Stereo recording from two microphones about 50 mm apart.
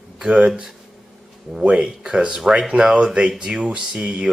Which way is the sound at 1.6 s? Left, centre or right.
Right.